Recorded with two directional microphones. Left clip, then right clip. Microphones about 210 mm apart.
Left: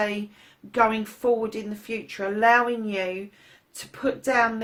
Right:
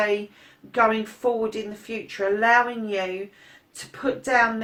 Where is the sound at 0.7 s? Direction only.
45° left (ahead or behind).